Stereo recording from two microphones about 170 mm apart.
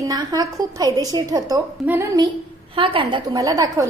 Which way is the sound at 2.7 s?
30° right (ahead or behind).